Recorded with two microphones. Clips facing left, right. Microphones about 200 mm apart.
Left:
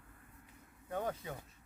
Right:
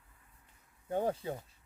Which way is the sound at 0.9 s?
30° right (ahead or behind).